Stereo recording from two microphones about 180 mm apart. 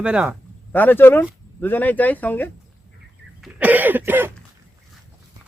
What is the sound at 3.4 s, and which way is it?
Throat clearing, 10° right (ahead or behind).